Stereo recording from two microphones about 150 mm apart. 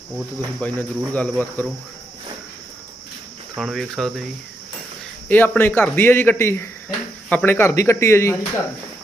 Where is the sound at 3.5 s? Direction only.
Centre (ahead or behind).